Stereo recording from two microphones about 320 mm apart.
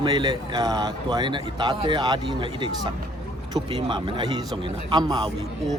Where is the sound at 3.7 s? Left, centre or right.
Centre.